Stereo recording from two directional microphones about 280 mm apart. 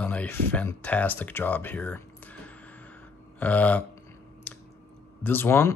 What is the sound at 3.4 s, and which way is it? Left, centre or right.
Speech, centre.